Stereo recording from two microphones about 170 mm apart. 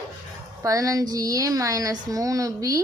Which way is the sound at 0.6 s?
20° right (ahead or behind).